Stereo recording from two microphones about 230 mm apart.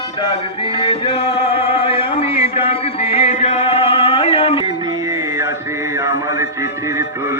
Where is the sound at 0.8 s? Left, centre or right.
Left.